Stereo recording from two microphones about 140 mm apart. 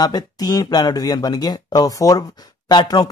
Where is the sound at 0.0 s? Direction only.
30° left (ahead or behind).